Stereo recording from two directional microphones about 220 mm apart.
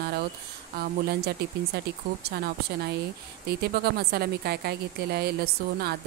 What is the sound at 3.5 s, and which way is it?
Speech, 45° right (ahead or behind).